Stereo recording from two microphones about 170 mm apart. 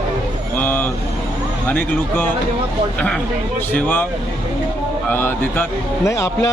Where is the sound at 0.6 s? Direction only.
10° left (ahead or behind).